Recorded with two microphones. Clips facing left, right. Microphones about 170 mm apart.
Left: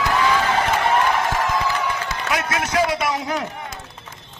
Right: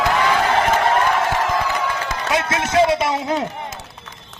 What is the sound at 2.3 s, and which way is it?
A man's voice, 25° right (ahead or behind).